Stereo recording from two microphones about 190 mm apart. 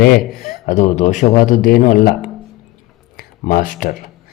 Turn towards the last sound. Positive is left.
turn(degrees=45)  # may be behind; listen again after turning